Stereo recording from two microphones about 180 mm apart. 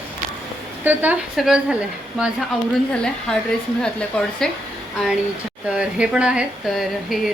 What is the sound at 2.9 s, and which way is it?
Speech, 5° left (ahead or behind).